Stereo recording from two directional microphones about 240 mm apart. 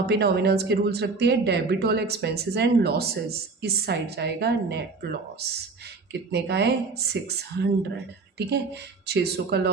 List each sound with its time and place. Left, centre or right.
0.1 s speech: right
6.3 s speech: right